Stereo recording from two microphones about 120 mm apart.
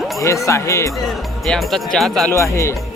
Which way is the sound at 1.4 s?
5° left (ahead or behind).